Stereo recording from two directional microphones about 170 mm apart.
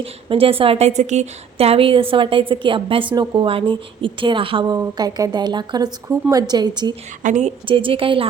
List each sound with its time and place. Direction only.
0.0 s a woman's voice: 35° right (ahead or behind)
7.2 s a woman's voice: 45° right (ahead or behind)
7.7 s a woman's voice: 30° right (ahead or behind)